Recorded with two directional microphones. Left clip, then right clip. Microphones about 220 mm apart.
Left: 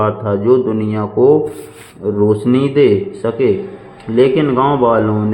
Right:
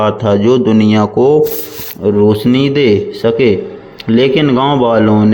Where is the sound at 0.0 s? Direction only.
35° right (ahead or behind).